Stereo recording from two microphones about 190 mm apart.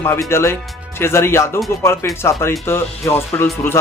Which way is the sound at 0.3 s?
15° left (ahead or behind).